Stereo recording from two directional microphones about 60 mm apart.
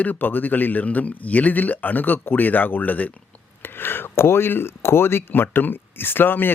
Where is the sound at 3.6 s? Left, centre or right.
Left.